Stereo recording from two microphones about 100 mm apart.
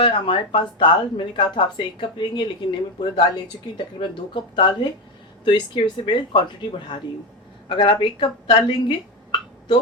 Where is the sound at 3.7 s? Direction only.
50° left (ahead or behind).